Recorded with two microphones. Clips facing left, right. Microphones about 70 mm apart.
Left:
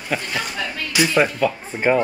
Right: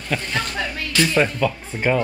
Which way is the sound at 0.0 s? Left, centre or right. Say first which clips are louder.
Even; centre.